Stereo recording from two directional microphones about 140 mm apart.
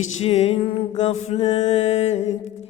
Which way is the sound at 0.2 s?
50° left (ahead or behind).